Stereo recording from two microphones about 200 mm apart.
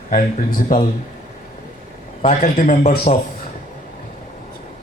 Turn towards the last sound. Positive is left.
turn(degrees=35)  # may be behind; listen again after turning